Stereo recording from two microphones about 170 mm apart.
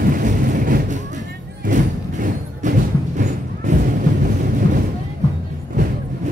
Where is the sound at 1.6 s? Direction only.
50° right (ahead or behind).